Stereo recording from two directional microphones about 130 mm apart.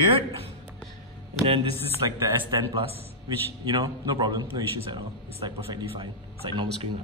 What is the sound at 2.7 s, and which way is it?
Speech, 50° right (ahead or behind).